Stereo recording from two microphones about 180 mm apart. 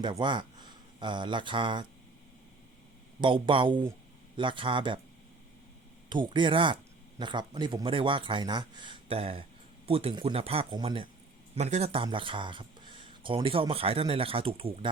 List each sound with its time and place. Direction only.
0.0 s speech: 25° right (ahead or behind)
3.2 s a man's voice: 30° right (ahead or behind)
6.1 s a man's voice: 25° right (ahead or behind)